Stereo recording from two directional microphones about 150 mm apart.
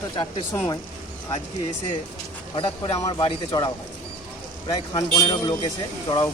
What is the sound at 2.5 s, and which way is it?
Speech, 35° left (ahead or behind).